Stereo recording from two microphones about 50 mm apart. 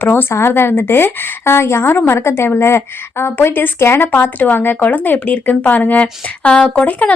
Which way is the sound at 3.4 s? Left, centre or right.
Left.